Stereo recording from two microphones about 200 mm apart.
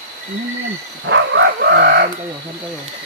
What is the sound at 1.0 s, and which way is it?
Speech, 65° right (ahead or behind).